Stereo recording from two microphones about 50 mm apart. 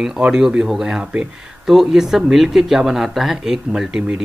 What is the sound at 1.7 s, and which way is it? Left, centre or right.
Speech, centre.